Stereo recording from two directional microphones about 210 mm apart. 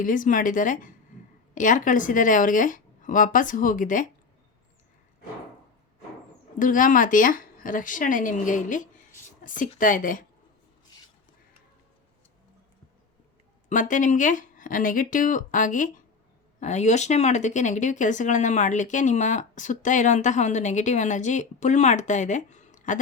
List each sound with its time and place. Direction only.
0.0 s speech: 40° left (ahead or behind)
6.6 s speech: 40° left (ahead or behind)
13.7 s speech: 35° left (ahead or behind)